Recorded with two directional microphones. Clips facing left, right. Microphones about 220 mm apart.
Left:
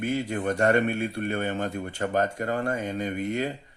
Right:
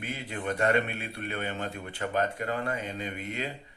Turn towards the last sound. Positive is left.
turn(degrees=45)  # may be behind; listen again after turning